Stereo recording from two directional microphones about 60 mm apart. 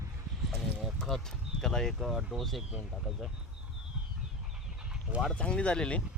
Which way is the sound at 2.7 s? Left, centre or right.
Centre.